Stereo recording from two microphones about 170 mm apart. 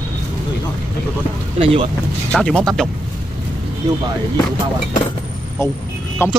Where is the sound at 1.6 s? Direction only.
35° right (ahead or behind).